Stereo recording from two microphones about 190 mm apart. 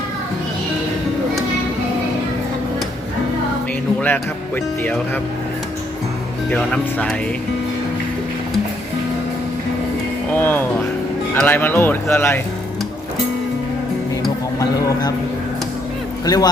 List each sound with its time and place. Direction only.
4.0 s speech: 10° left (ahead or behind)
6.5 s speech: 5° left (ahead or behind)
10.3 s speech: 10° left (ahead or behind)
16.2 s speech: 20° left (ahead or behind)